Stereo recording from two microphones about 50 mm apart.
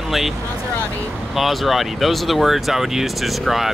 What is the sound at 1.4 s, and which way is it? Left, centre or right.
Speech, centre.